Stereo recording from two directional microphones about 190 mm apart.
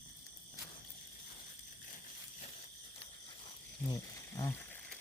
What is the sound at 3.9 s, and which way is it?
Wild animals, 15° left (ahead or behind).